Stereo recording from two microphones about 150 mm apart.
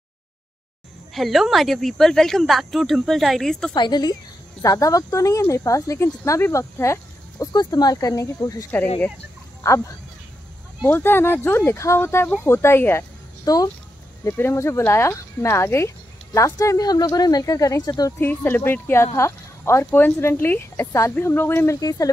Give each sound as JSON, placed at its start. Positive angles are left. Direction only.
{"t": 1.1, "sound": "speech", "side_deg": 0}
{"t": 3.7, "sound": "speech", "side_deg": 30}
{"t": 9.6, "sound": "speech", "side_deg": 20}
{"t": 10.9, "sound": "speech", "side_deg": 15}
{"t": 13.5, "sound": "speech", "side_deg": 25}
{"t": 14.2, "sound": "speech", "side_deg": 15}
{"t": 18.2, "sound": "speech", "side_deg": 10}